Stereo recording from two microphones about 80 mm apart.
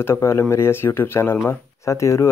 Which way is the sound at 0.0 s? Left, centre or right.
Left.